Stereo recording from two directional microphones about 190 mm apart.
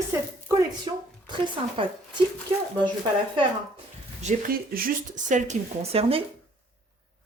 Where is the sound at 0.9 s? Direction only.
25° right (ahead or behind).